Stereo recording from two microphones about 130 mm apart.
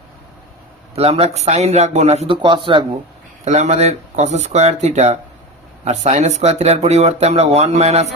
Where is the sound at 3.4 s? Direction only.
60° right (ahead or behind).